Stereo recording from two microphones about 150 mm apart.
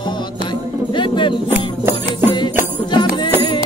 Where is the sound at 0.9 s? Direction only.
35° left (ahead or behind).